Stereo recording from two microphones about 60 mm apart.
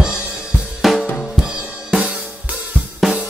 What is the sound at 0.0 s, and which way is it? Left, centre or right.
Drum kit, centre.